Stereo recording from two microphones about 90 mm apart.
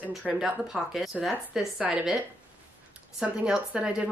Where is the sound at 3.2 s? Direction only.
10° right (ahead or behind).